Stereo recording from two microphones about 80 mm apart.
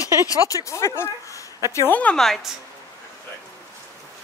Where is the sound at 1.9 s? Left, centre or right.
Centre.